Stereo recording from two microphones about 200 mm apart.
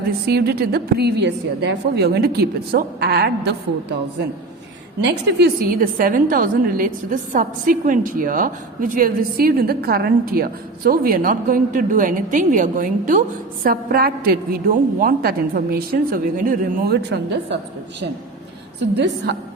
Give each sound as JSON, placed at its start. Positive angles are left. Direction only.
{"t": 0.3, "sound": "a woman's voice", "side_deg": -50}
{"t": 5.4, "sound": "a woman's voice", "side_deg": -45}
{"t": 18.8, "sound": "a woman's voice", "side_deg": -60}